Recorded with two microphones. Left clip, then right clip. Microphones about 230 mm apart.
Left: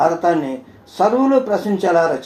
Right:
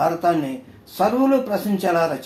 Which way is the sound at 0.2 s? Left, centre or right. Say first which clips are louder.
Left 3 dB; right.